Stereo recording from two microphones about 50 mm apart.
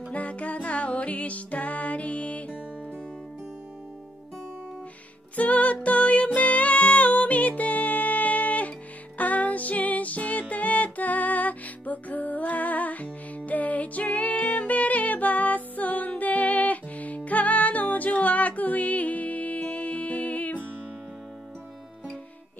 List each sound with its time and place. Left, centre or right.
0.1 s music: left
5.3 s music: left